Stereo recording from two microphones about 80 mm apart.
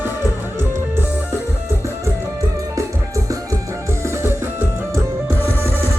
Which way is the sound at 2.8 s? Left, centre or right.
Right.